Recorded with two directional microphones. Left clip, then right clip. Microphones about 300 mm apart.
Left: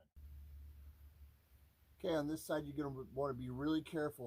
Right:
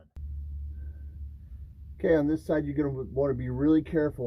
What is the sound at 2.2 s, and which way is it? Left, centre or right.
Speech, centre.